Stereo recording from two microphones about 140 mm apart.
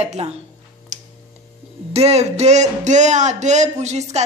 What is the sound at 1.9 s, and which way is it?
Speech, 50° right (ahead or behind).